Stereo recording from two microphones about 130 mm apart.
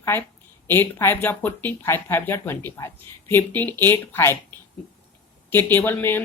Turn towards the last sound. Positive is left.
turn(degrees=15)  # may be behind; listen again after turning